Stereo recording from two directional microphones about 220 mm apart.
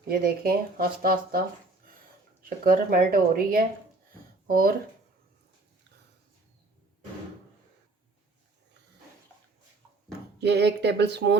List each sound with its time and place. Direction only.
0.1 s speech: 40° right (ahead or behind)
2.4 s speech: 40° right (ahead or behind)
10.4 s speech: 50° right (ahead or behind)